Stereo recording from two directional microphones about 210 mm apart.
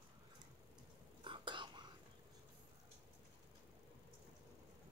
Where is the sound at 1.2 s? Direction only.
25° right (ahead or behind).